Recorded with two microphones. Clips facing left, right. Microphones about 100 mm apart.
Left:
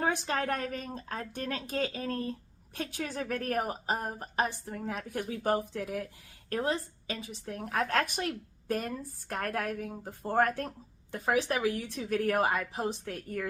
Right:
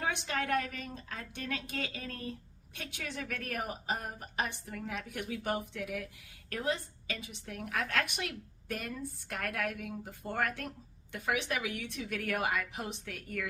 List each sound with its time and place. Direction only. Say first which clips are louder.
0.0 s a woman's voice: left 4 dB; 40° left (ahead or behind)